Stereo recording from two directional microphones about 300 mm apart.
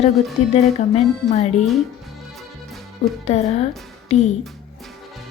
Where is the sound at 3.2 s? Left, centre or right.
Left.